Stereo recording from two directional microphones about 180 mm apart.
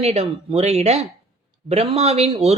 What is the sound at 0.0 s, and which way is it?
Speech, 35° right (ahead or behind).